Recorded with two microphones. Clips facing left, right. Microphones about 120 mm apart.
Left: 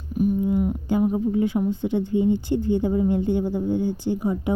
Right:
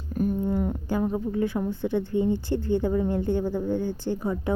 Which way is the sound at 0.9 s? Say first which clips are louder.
Left 7 dB; 20° left (ahead or behind).